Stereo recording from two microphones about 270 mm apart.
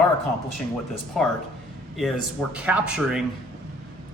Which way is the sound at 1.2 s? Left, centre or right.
Centre.